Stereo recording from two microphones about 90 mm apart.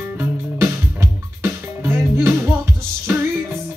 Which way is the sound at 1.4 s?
30° right (ahead or behind).